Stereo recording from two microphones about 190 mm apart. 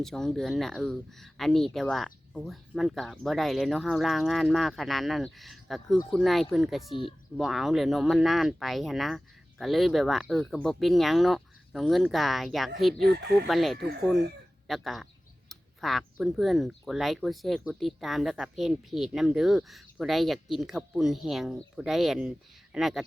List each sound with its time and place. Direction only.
0.0 s speech: centre (ahead or behind)
13.0 s speech: 60° right (ahead or behind)
13.5 s speech: centre (ahead or behind)